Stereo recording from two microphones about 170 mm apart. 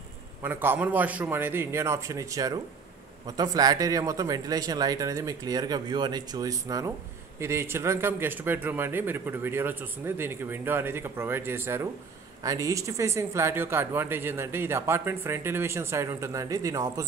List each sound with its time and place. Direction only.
0.4 s a man's voice: 10° right (ahead or behind)